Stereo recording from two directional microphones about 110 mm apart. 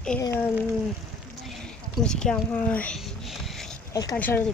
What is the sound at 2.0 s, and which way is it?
Speech, 5° left (ahead or behind).